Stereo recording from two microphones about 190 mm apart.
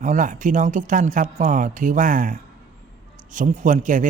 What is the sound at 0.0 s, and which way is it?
A man's voice, 40° right (ahead or behind).